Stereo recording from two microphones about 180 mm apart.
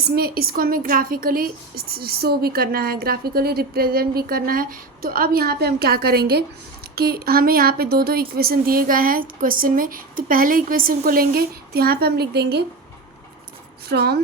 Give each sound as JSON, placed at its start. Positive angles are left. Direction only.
{"t": 0.1, "sound": "a woman's voice", "side_deg": -60}
{"t": 13.8, "sound": "a woman's voice", "side_deg": -60}